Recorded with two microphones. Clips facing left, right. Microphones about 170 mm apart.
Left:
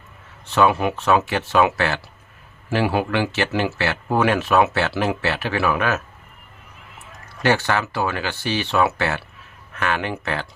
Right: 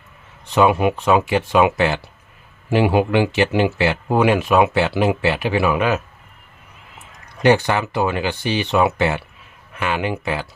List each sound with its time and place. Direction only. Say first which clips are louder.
0.4 s speech: right 3 dB; 15° right (ahead or behind)
7.4 s speech: right 4 dB; 15° right (ahead or behind)